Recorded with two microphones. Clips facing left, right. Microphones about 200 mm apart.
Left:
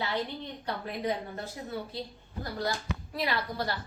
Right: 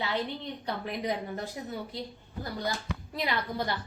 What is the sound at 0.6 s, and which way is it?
Speech, 15° right (ahead or behind).